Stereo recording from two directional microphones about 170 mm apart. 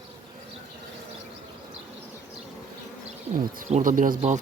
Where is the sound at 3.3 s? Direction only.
55° right (ahead or behind).